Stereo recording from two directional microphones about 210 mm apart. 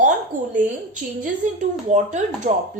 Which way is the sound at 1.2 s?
35° right (ahead or behind).